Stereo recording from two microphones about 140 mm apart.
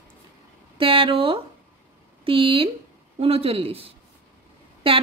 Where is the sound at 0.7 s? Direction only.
40° right (ahead or behind).